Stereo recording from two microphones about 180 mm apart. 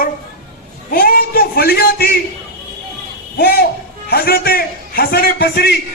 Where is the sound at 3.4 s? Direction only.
60° left (ahead or behind).